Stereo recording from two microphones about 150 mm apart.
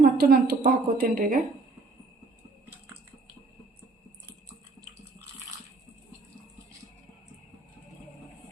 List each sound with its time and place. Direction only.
0.0 s a woman's voice: 90° right; by 1.4 s 70° right (ahead or behind)